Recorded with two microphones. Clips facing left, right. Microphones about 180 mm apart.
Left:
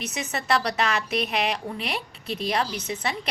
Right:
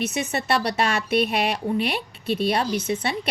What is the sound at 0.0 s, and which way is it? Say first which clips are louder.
A woman's voice: right 6 dB; 30° right (ahead or behind).